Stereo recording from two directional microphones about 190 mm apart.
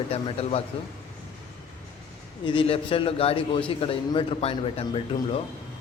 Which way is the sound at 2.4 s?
30° left (ahead or behind).